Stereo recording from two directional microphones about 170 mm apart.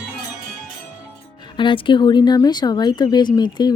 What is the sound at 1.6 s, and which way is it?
A woman's voice, 30° left (ahead or behind).